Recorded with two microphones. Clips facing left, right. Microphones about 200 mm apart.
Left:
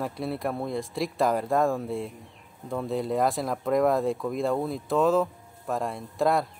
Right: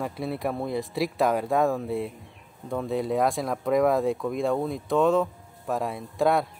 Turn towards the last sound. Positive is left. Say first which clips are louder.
# right 1 dB
turn(degrees=0)  # may be behind; listen again after turning